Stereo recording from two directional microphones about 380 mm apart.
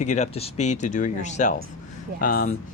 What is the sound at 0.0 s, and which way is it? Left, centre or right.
Speech, centre.